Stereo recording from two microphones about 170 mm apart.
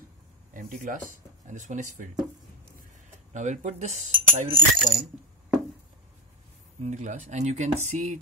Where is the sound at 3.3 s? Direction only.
45° right (ahead or behind).